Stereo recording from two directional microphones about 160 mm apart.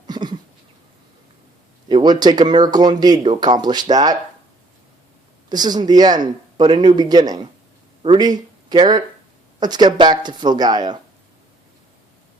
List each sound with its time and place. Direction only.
0.1 s a sound: 25° right (ahead or behind)
1.9 s speech: 30° right (ahead or behind)
5.5 s speech: 25° right (ahead or behind)